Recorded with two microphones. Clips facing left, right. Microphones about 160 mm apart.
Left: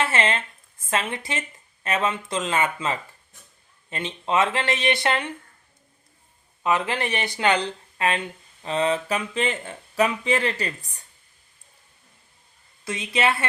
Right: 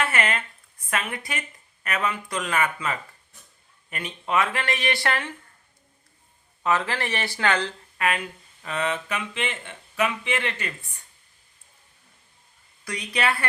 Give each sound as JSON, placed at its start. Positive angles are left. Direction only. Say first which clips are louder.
{"t": 0.0, "sound": "speech", "louder": "left 2 dB", "side_deg": 25}
{"t": 6.6, "sound": "speech", "louder": "left 1 dB", "side_deg": 15}
{"t": 12.8, "sound": "speech", "louder": "left 3 dB", "side_deg": 25}